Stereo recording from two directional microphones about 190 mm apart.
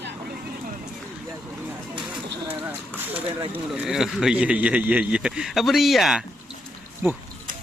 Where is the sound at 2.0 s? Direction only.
5° right (ahead or behind).